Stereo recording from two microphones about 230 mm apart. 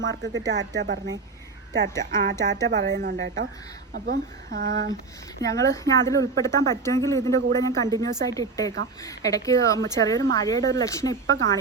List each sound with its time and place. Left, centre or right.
0.0 s speech: right
5.4 s speech: centre